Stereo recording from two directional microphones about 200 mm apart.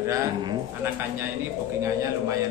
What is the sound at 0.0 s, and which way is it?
Speech, 15° right (ahead or behind).